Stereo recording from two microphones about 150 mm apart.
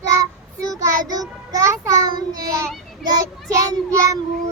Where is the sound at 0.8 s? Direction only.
25° right (ahead or behind).